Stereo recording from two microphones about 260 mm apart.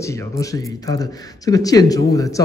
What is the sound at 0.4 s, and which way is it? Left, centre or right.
A man's voice, centre.